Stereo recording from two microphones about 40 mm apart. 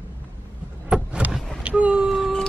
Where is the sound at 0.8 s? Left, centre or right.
Right.